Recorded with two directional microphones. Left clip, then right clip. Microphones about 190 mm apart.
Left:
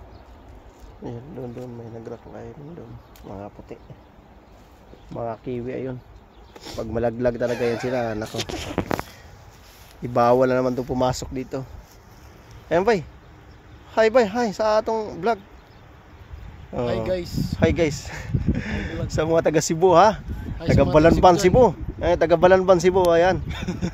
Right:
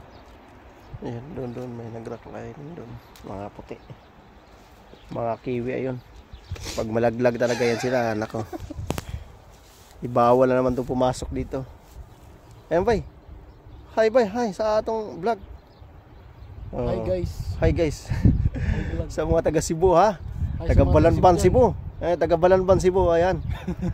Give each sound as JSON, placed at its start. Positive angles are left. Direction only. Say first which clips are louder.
{"t": 1.0, "sound": "speech", "louder": "right 1 dB", "side_deg": -40}
{"t": 5.1, "sound": "speech", "louder": "right 2 dB", "side_deg": -40}
{"t": 6.5, "sound": "a sound", "louder": "right 2 dB", "side_deg": 15}
{"t": 6.9, "sound": "speech", "louder": "right 1 dB", "side_deg": -35}
{"t": 7.5, "sound": "speech", "louder": "right 1 dB", "side_deg": 50}
{"t": 7.8, "sound": "speech", "louder": "right 2 dB", "side_deg": -15}
{"t": 10.0, "sound": "speech", "louder": "even", "side_deg": 0}
{"t": 12.6, "sound": "speech", "louder": "left 2 dB", "side_deg": 15}
{"t": 17.1, "sound": "speech", "louder": "left 2 dB", "side_deg": -5}
{"t": 17.6, "sound": "a man's voice", "louder": "left 2 dB", "side_deg": 20}
{"t": 23.5, "sound": "speech", "louder": "left 3 dB", "side_deg": 0}